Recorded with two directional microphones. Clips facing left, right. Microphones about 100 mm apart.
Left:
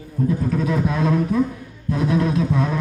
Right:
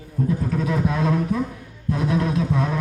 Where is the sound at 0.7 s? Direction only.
35° right (ahead or behind).